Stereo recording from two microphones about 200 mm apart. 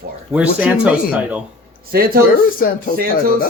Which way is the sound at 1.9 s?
50° right (ahead or behind).